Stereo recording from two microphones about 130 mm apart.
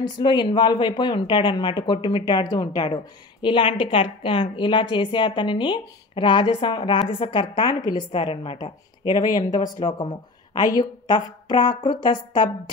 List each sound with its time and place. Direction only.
0.0 s a woman's voice: 35° left (ahead or behind)
8.1 s a woman's voice: 45° left (ahead or behind)